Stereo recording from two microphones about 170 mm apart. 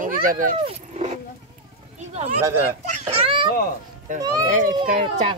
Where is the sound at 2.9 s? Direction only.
40° right (ahead or behind).